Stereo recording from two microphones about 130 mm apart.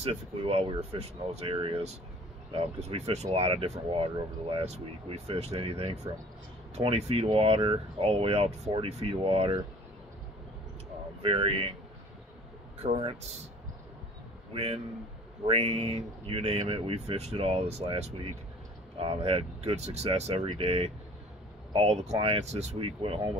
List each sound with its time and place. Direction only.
0.0 s speech: 50° right (ahead or behind)
11.2 s speech: 45° right (ahead or behind)
13.0 s speech: 55° right (ahead or behind)
14.5 s speech: 50° right (ahead or behind)